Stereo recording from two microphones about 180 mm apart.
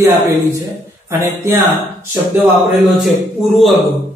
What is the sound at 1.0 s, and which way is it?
Speech, 15° right (ahead or behind).